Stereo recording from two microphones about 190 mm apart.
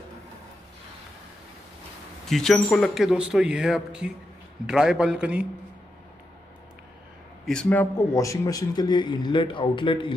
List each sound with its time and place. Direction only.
2.2 s speech: centre (ahead or behind)
7.4 s a man's voice: 5° left (ahead or behind); by 10.1 s 25° left (ahead or behind)